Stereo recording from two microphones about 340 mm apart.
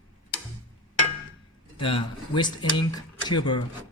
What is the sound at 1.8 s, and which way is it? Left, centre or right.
Speech, centre.